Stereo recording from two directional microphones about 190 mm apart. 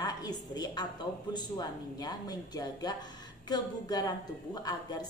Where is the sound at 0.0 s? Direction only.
20° left (ahead or behind).